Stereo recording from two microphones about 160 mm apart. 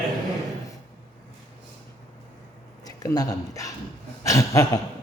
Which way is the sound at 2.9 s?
25° left (ahead or behind).